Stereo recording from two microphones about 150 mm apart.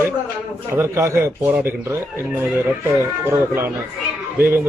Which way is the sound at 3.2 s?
15° right (ahead or behind).